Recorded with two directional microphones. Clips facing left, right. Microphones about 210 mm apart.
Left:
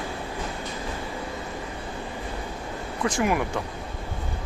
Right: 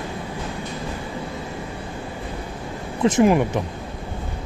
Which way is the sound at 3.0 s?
25° right (ahead or behind).